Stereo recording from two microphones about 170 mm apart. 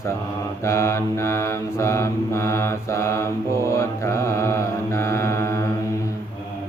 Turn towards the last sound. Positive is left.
turn(degrees=15)  # may be behind; listen again after turning